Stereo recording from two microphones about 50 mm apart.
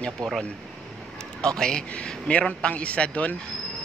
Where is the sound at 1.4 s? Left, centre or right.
Centre.